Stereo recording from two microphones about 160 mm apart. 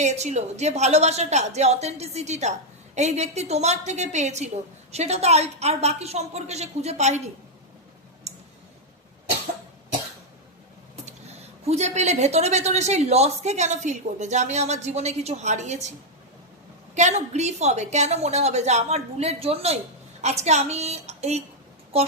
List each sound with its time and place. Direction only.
0.0 s a woman's voice: 45° right (ahead or behind)
8.3 s clicking: 45° right (ahead or behind)
11.6 s a woman's voice: 45° right (ahead or behind)
16.9 s a woman's voice: 45° right (ahead or behind)